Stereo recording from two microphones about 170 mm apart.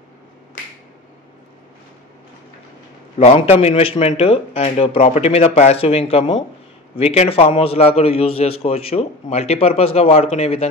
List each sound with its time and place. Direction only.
3.2 s a man's voice: 40° left (ahead or behind)